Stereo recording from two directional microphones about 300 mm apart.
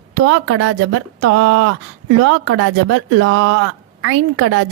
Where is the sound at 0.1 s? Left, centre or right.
Right.